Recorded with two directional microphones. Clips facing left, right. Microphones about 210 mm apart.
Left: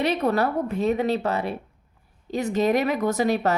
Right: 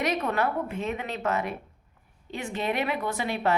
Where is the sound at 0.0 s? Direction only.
35° left (ahead or behind).